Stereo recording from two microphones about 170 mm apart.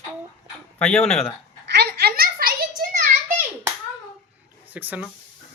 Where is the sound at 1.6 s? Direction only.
75° right (ahead or behind); by 3.0 s 55° right (ahead or behind).